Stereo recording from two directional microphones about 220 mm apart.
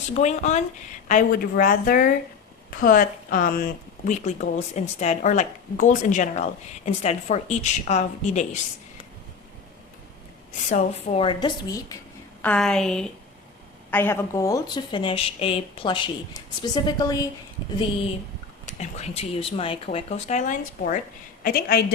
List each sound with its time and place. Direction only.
0.2 s speech: 30° left (ahead or behind)
10.7 s speech: 30° left (ahead or behind)
12.4 s a woman's voice: 5° left (ahead or behind)
18.6 s a woman's voice: 30° left (ahead or behind)